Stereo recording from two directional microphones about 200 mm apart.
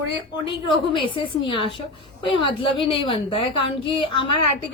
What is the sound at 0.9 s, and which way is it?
Speech, 25° left (ahead or behind).